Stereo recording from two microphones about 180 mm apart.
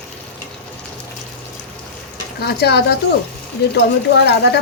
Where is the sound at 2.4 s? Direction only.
65° left (ahead or behind).